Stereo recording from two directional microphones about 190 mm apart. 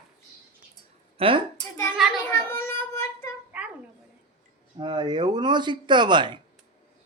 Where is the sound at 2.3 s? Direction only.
15° left (ahead or behind).